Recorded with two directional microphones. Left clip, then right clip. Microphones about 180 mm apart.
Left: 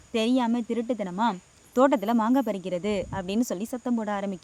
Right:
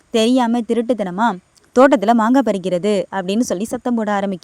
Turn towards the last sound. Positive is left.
turn(degrees=-45)  # may be behind; listen again after turning